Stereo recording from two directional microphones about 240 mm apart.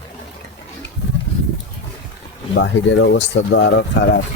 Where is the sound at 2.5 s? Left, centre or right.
Left.